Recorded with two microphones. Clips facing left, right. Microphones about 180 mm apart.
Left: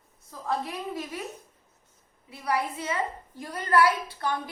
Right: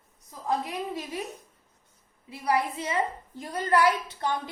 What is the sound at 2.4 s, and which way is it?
A woman's voice, 25° right (ahead or behind).